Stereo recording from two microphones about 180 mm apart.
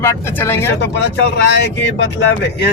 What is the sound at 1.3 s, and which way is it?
Speech, 75° left (ahead or behind).